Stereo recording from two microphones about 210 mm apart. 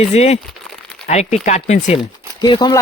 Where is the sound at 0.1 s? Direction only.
30° left (ahead or behind).